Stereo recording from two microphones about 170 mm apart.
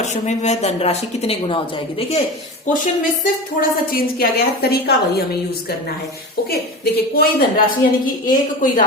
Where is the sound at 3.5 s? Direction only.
60° left (ahead or behind).